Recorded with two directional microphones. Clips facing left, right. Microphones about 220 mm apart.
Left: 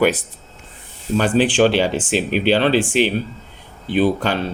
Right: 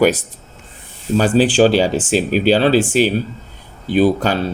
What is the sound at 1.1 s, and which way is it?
Speech, 40° right (ahead or behind).